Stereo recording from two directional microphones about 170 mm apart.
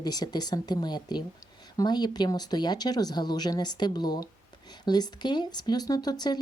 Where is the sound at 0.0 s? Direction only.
25° left (ahead or behind).